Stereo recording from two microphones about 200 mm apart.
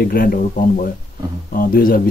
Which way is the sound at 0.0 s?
45° left (ahead or behind).